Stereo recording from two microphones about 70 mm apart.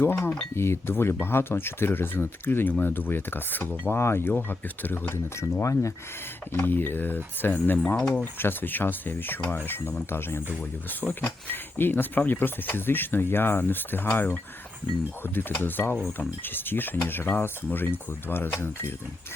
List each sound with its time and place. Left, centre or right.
0.0 s speech: left
5.4 s speech: left
6.5 s speech: left